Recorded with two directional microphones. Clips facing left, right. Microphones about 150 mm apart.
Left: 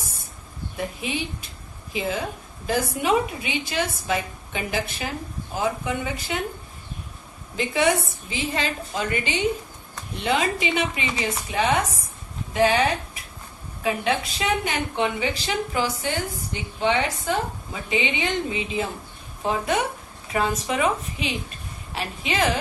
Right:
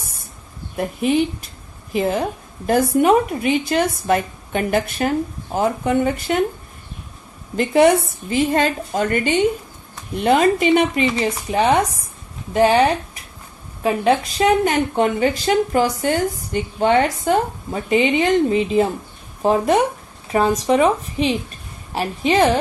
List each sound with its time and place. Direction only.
0.8 s a woman's voice: 50° right (ahead or behind)
7.5 s a woman's voice: 55° right (ahead or behind)
13.8 s a woman's voice: 40° right (ahead or behind)